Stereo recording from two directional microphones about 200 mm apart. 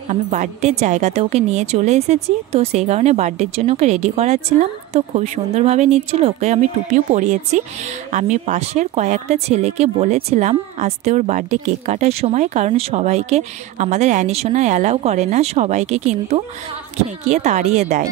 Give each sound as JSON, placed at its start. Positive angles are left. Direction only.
{"t": 0.1, "sound": "speech", "side_deg": -35}